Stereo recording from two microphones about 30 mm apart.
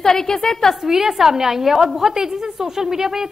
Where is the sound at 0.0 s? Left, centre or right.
Centre.